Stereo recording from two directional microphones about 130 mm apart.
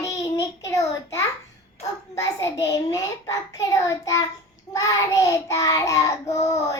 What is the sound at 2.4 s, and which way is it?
Child singing, 25° left (ahead or behind).